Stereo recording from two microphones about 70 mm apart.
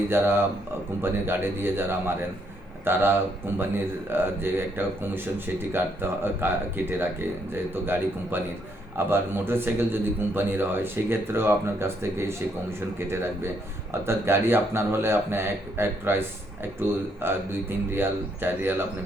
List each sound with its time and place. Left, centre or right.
0.1 s speech: right
14.0 s speech: right